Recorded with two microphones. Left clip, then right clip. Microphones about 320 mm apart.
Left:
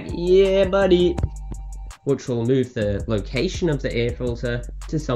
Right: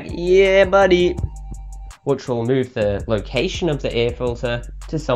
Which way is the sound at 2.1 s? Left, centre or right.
Centre.